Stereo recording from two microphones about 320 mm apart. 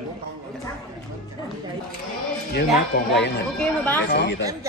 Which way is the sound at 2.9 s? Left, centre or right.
Left.